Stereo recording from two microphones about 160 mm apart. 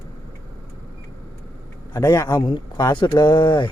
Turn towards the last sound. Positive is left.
turn(degrees=30)  # may be behind; listen again after turning